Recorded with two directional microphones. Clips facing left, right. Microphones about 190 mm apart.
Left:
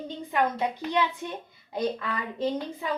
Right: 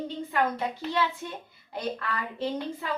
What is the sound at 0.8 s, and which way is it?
Speech, 15° left (ahead or behind).